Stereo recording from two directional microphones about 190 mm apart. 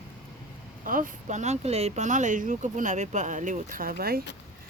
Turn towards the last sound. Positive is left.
turn(degrees=-50)  # may be behind; listen again after turning